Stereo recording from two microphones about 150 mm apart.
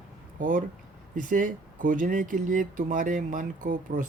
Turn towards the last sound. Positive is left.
turn(degrees=-60)  # may be behind; listen again after turning